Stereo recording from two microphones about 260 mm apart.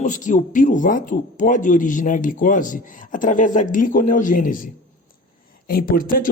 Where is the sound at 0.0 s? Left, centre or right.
Left.